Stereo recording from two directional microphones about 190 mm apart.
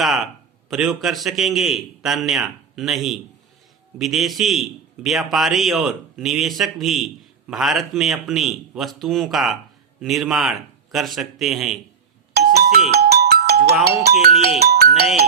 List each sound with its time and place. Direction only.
0.0 s speech: centre (ahead or behind)
12.3 s doorbell: 55° right (ahead or behind)
12.9 s music: 55° right (ahead or behind)
13.8 s speech: 50° right (ahead or behind)